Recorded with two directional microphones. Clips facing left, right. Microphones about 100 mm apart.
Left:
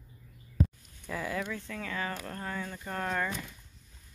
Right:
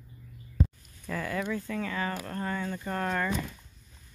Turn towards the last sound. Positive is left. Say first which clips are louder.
# right 3 dB
turn(degrees=0)  # may be behind; listen again after turning